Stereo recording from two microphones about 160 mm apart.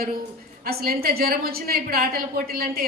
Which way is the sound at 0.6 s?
70° right (ahead or behind).